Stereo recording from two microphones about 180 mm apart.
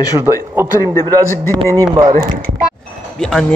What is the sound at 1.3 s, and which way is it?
Speech, 15° left (ahead or behind).